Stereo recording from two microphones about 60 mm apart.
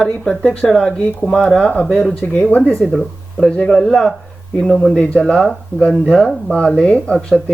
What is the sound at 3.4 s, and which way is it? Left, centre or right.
Speech, centre.